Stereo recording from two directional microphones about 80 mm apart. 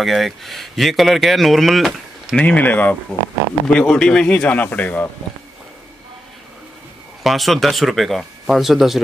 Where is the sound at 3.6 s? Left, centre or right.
Centre.